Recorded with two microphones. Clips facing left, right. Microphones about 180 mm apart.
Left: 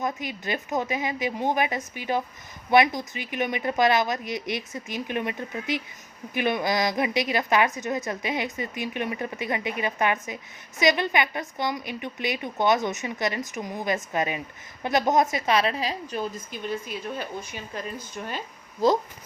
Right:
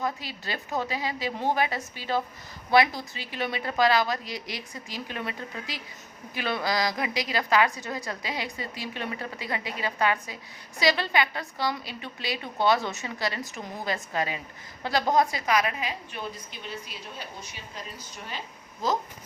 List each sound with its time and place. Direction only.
0.0 s a woman's voice: 20° left (ahead or behind); by 18.4 s 50° left (ahead or behind)